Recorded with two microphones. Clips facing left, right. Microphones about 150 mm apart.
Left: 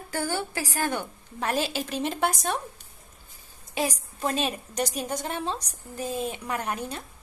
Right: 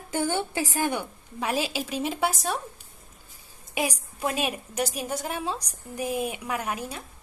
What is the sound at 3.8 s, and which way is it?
A woman's voice, 10° right (ahead or behind).